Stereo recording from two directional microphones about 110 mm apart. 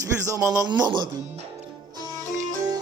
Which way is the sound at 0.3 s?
30° right (ahead or behind).